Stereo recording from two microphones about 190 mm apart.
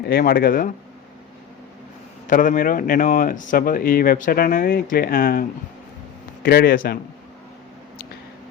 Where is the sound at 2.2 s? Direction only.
45° left (ahead or behind).